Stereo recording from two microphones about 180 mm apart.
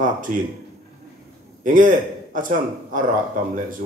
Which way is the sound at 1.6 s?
45° right (ahead or behind).